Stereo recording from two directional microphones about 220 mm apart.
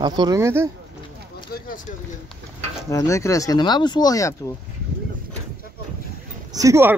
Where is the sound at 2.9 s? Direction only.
15° left (ahead or behind).